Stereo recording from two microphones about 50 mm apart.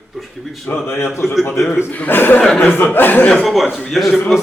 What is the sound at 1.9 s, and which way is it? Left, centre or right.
Speech, left.